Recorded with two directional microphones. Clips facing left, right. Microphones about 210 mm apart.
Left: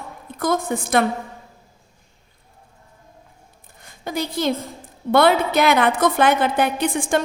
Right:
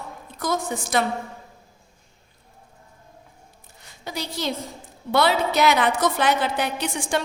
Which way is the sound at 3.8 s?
50° left (ahead or behind).